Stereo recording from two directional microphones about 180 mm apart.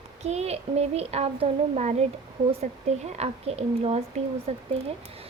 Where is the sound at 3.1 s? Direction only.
35° right (ahead or behind).